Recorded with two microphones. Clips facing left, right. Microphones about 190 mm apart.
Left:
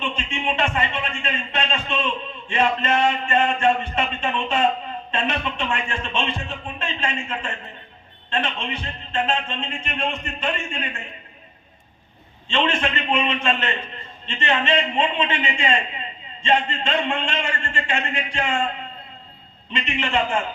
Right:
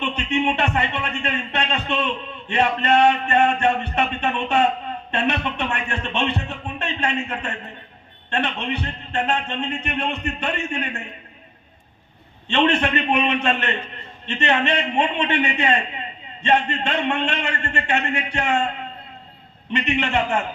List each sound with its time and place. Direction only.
0.0 s a sound: 65° right (ahead or behind)
5.1 s music: 65° right (ahead or behind)
8.3 s a man's voice: 65° right (ahead or behind)
12.5 s a man's voice: 65° right (ahead or behind)
19.7 s a man's voice: 65° right (ahead or behind)